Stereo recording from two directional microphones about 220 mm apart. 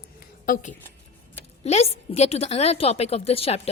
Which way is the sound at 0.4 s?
35° left (ahead or behind).